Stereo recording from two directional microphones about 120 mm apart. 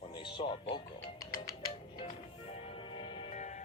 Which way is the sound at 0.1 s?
40° left (ahead or behind).